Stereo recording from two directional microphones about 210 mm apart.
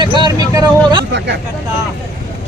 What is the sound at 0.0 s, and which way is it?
Vehicle, 20° right (ahead or behind).